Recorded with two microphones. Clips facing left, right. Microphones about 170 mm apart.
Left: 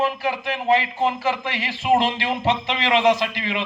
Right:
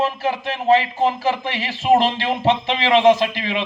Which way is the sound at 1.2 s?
20° right (ahead or behind).